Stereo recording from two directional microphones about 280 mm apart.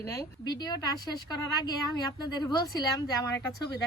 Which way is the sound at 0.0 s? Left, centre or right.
Centre.